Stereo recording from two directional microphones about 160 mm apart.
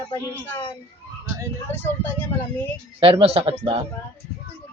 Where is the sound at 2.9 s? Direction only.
35° right (ahead or behind).